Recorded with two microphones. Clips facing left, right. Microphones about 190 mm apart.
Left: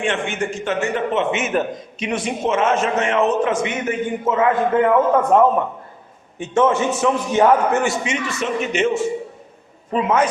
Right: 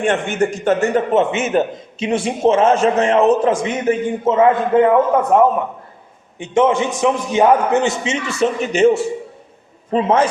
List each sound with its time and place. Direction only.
0.0 s a man's voice: 40° right (ahead or behind)
5.3 s a man's voice: 15° right (ahead or behind); by 10.2 s 30° right (ahead or behind)